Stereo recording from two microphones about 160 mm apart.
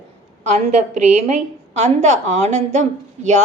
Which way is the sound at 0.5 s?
45° right (ahead or behind).